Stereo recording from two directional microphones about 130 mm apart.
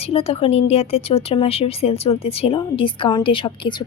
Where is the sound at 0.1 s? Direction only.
50° left (ahead or behind).